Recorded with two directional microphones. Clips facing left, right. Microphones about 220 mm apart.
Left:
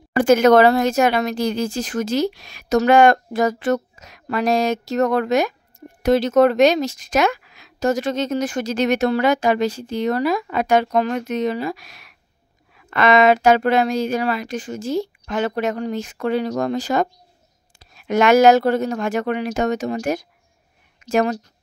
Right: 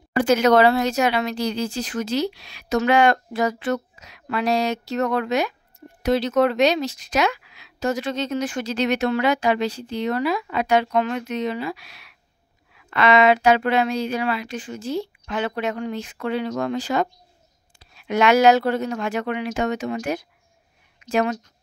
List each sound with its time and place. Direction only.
0.2 s a woman's voice: 50° left (ahead or behind)